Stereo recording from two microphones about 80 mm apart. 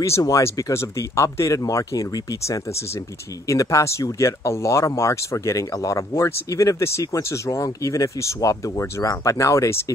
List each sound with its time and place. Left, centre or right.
0.2 s speech: left